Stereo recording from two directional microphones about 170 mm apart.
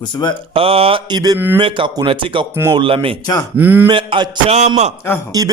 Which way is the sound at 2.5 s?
15° right (ahead or behind).